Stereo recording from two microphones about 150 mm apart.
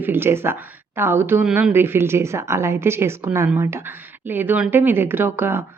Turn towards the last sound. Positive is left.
turn(degrees=-15)  # may be behind; listen again after turning